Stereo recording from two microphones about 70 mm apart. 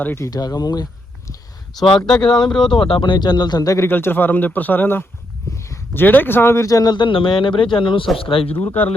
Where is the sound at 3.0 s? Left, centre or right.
Left.